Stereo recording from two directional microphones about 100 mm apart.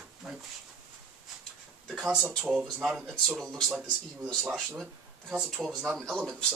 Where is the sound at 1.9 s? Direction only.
10° right (ahead or behind).